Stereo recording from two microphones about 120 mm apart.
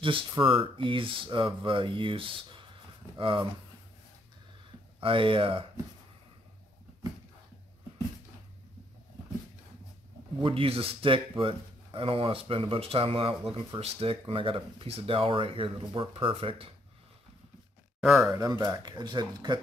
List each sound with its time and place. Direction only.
0.0 s speech: 45° right (ahead or behind)
5.0 s speech: 45° right (ahead or behind)
10.4 s speech: 50° right (ahead or behind)
18.0 s speech: 5° right (ahead or behind)
18.3 s speech: 35° right (ahead or behind)